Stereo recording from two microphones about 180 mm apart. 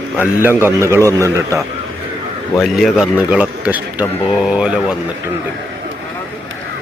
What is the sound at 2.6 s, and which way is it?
A man's voice, centre (ahead or behind).